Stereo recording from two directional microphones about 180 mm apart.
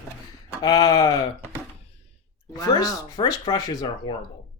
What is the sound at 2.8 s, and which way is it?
Speech, 20° left (ahead or behind).